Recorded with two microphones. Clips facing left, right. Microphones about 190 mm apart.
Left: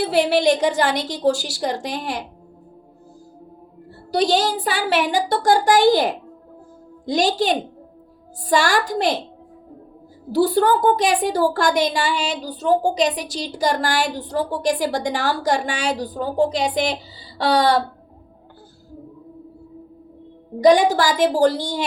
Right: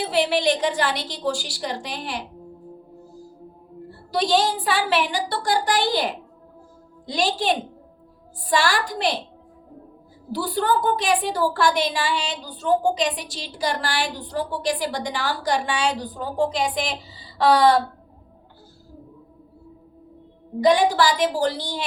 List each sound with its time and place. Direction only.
0.0 s a woman's voice: 45° left (ahead or behind)
4.1 s a woman's voice: 40° left (ahead or behind)
8.5 s a woman's voice: 45° left (ahead or behind)
10.3 s a woman's voice: 40° left (ahead or behind)
20.7 s a woman's voice: 45° left (ahead or behind)